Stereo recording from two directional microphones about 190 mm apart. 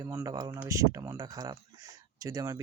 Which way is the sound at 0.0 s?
15° right (ahead or behind).